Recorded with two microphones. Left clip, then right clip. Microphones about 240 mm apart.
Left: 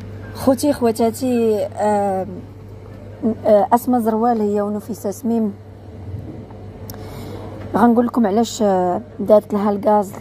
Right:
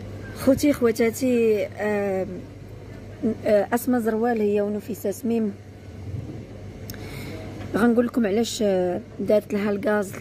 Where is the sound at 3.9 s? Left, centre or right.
Left.